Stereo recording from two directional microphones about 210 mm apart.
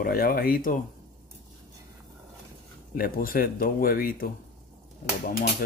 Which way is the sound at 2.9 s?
45° left (ahead or behind).